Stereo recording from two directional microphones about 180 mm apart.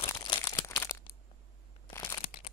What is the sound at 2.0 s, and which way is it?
Crumpling, 25° left (ahead or behind).